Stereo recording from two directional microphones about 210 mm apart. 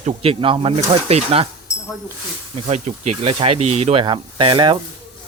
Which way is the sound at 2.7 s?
30° right (ahead or behind).